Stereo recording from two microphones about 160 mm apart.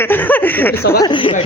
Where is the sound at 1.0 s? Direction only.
30° left (ahead or behind).